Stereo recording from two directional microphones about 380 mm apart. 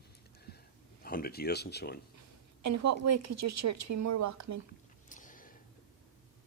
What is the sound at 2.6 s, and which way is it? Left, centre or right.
Speech, right.